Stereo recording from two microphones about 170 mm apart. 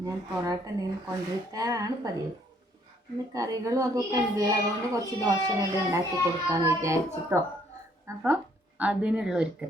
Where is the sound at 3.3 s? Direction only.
20° right (ahead or behind).